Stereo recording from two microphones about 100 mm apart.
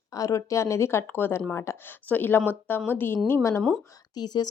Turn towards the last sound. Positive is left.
turn(degrees=45)  # may be behind; listen again after turning